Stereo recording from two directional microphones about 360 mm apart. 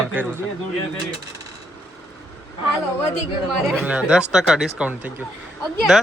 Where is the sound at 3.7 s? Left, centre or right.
Centre.